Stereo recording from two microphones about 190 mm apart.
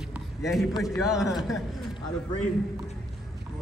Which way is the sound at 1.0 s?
Centre (ahead or behind).